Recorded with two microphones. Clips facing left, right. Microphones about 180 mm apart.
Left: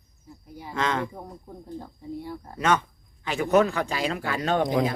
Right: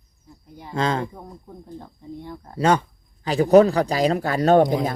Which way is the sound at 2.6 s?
30° right (ahead or behind).